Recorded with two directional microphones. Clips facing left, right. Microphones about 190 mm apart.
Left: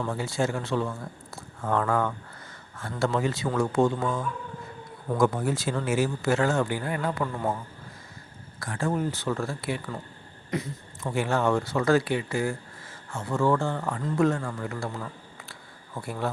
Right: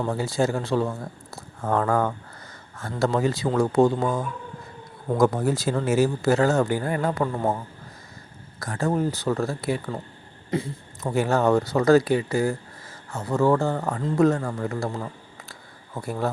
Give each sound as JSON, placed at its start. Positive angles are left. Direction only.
{"t": 0.0, "sound": "speech", "side_deg": -35}